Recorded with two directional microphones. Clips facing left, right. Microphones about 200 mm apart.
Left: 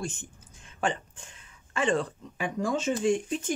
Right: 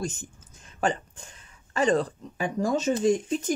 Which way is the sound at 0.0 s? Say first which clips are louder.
Right 3 dB; 40° right (ahead or behind).